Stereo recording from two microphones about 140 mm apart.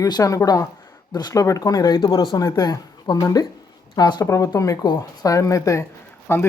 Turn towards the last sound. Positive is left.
turn(degrees=15)  # may be behind; listen again after turning